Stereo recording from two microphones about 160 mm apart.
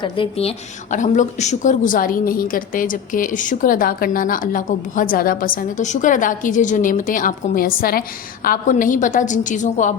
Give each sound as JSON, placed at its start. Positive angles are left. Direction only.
{"t": 0.0, "sound": "a woman's voice", "side_deg": 35}
{"t": 8.4, "sound": "a woman's voice", "side_deg": 55}